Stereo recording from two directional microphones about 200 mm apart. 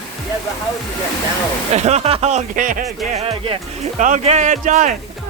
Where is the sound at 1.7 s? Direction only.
35° right (ahead or behind).